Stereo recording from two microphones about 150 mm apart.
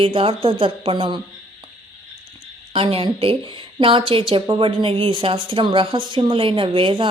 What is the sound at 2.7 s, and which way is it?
A woman's voice, 40° right (ahead or behind).